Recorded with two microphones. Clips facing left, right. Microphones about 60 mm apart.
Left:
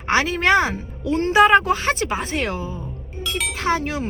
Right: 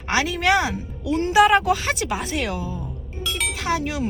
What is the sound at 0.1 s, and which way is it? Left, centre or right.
Speech, left.